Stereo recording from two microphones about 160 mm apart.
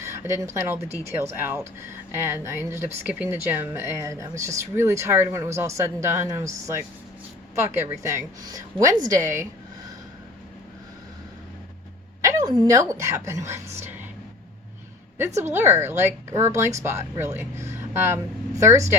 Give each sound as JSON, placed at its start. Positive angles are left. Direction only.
{"t": 0.0, "sound": "a woman's voice", "side_deg": -20}
{"t": 12.6, "sound": "a woman's voice", "side_deg": -20}
{"t": 15.5, "sound": "speech", "side_deg": -15}